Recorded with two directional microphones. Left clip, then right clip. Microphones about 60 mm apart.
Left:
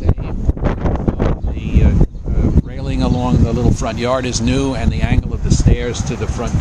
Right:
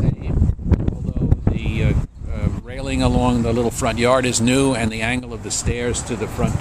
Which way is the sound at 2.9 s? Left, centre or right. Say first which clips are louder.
Even; right.